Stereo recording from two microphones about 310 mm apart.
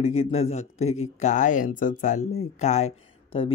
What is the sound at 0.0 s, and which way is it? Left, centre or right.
Speech, centre.